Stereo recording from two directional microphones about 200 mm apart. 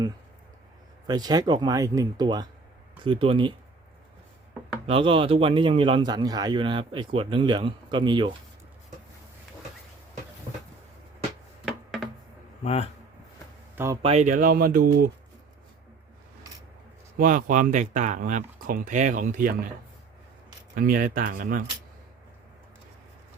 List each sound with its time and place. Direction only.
1.0 s a man's voice: 20° right (ahead or behind)
4.9 s a man's voice: 25° right (ahead or behind)
12.6 s speech: 30° left (ahead or behind)
13.7 s speech: 15° right (ahead or behind)
14.0 s speech: 35° right (ahead or behind)
17.2 s speech: 40° right (ahead or behind)
20.7 s speech: 45° right (ahead or behind)